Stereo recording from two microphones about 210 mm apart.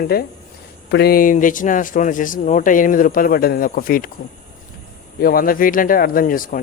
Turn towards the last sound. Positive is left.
turn(degrees=40)  # may be behind; listen again after turning